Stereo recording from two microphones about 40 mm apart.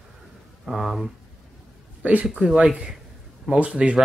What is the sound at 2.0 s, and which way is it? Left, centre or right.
Speech, right.